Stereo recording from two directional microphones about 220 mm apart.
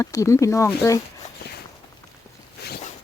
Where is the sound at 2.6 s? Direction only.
45° left (ahead or behind).